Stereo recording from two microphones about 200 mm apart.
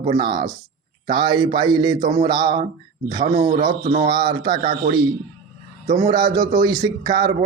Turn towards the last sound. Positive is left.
turn(degrees=-20)  # may be behind; listen again after turning